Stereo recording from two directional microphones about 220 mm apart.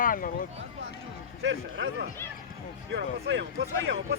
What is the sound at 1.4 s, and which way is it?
A man's voice, 55° right (ahead or behind).